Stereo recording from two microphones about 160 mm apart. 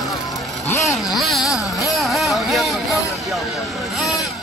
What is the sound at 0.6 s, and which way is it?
Vehicle, 15° left (ahead or behind).